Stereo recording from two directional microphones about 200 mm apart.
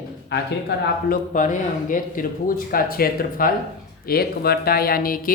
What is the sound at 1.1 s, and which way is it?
Speech, 40° left (ahead or behind).